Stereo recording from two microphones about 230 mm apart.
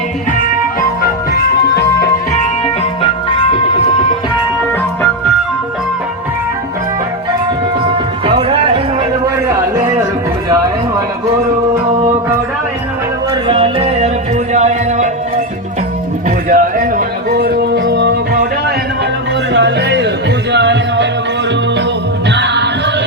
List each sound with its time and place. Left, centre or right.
1.0 s music: left
3.0 s music: left
8.3 s a sound: right
13.3 s music: right
14.5 s a sound: right
16.5 s music: right
19.5 s music: right
22.3 s music: right